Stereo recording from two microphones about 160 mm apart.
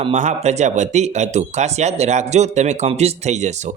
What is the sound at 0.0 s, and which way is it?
Speech, 45° right (ahead or behind).